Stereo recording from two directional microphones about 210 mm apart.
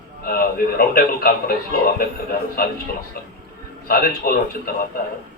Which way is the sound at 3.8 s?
45° left (ahead or behind).